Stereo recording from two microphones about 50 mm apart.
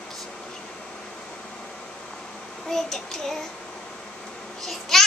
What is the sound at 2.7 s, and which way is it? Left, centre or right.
Child singing, centre.